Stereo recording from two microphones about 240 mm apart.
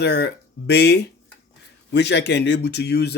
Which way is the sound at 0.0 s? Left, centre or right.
Left.